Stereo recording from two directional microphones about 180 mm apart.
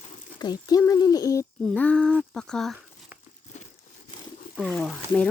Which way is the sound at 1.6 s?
5° left (ahead or behind).